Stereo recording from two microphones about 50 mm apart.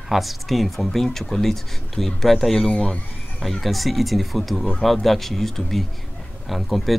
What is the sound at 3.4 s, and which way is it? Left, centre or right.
Speech, centre.